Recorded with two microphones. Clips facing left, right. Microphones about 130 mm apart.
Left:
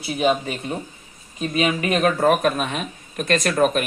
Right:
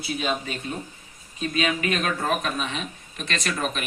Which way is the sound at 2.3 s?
50° left (ahead or behind).